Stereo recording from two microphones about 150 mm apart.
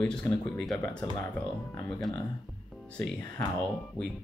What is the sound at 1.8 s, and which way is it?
Speech, 5° left (ahead or behind).